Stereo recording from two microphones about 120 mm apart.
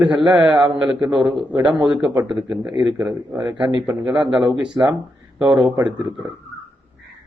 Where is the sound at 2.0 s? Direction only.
35° right (ahead or behind).